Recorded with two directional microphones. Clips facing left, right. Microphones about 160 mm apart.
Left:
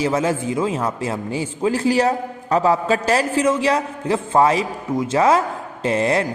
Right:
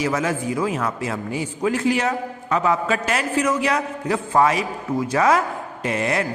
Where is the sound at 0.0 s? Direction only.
30° left (ahead or behind).